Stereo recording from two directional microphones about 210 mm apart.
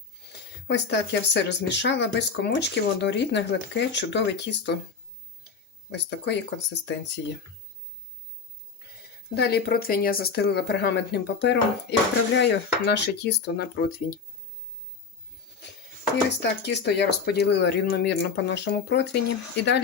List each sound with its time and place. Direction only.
0.7 s speech: 55° left (ahead or behind)
5.9 s speech: 55° left (ahead or behind)
9.3 s speech: 50° left (ahead or behind)
16.4 s speech: 55° left (ahead or behind)